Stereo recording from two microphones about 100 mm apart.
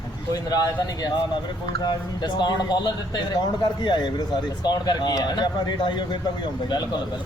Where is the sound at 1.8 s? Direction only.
50° left (ahead or behind).